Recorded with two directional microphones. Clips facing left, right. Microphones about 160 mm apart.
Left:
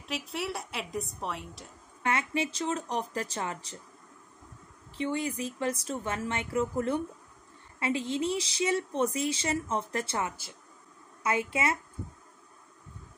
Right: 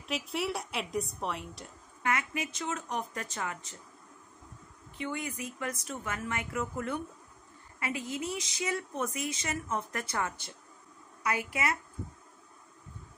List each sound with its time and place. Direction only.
0.0 s a woman's voice: centre (ahead or behind)
2.0 s speech: 30° left (ahead or behind)
4.9 s speech: 30° left (ahead or behind)